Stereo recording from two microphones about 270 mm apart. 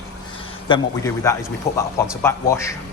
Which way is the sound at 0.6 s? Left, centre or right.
Centre.